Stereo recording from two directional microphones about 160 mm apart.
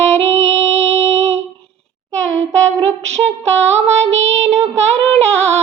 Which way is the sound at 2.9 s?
45° right (ahead or behind).